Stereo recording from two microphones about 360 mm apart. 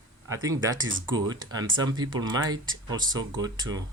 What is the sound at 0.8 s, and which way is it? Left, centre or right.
Speech, right.